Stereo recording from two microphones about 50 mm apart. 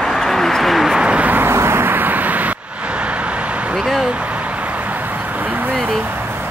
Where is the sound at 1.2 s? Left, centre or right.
Right.